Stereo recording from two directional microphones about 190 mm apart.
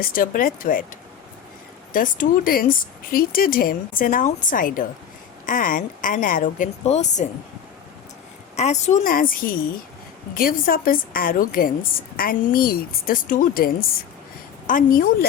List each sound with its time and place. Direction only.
0.0 s a woman's voice: 45° left (ahead or behind)
1.9 s a woman's voice: 45° left (ahead or behind)
8.5 s a woman's voice: 35° left (ahead or behind)
14.7 s a woman's voice: 45° left (ahead or behind)